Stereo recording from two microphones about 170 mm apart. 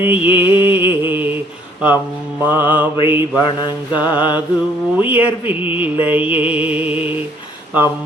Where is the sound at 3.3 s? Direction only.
25° left (ahead or behind).